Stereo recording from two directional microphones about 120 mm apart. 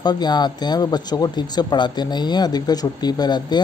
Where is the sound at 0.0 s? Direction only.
35° left (ahead or behind).